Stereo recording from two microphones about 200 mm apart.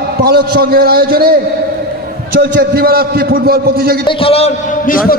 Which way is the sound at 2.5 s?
50° right (ahead or behind).